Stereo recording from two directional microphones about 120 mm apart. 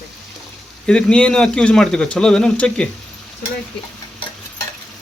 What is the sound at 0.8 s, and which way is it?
Speech, 10° left (ahead or behind).